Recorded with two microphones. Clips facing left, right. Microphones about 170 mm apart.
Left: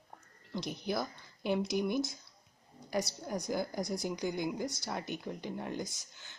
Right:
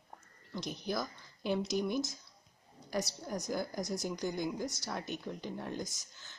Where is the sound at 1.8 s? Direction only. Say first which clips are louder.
Left 1 dB; 15° left (ahead or behind).